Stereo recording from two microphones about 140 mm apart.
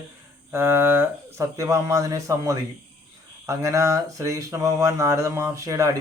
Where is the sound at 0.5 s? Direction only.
15° right (ahead or behind).